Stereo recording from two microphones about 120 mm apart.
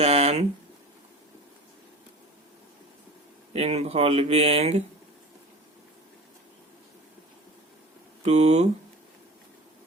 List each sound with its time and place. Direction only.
0.0 s speech: 60° right (ahead or behind)
3.5 s speech: 60° right (ahead or behind)
8.2 s speech: 65° right (ahead or behind)